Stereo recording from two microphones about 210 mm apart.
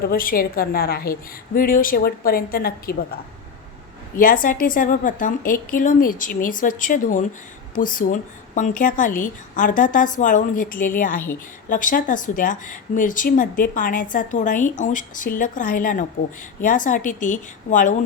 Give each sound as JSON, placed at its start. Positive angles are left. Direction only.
{"t": 0.0, "sound": "speech", "side_deg": 45}
{"t": 4.2, "sound": "speech", "side_deg": 40}